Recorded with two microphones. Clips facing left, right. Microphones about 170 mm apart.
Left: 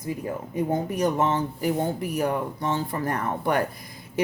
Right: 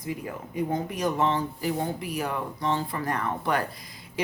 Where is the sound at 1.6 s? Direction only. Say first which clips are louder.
Left 4 dB; 50° left (ahead or behind).